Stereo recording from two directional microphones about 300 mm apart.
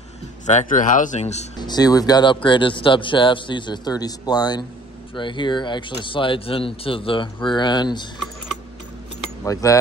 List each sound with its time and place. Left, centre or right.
0.5 s speech: left
9.4 s speech: centre